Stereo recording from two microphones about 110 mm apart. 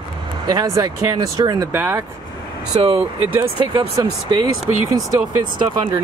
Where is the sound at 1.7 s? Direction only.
20° right (ahead or behind).